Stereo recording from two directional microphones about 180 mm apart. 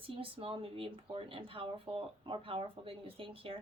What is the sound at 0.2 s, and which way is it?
A woman's voice, 30° right (ahead or behind).